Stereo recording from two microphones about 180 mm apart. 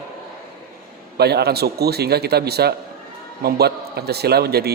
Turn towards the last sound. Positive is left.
turn(degrees=-60)  # may be behind; listen again after turning